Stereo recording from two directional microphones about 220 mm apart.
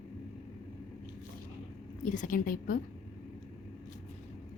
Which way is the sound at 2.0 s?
35° left (ahead or behind).